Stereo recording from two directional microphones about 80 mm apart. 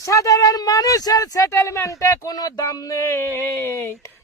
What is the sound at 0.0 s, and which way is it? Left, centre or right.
Speech, left.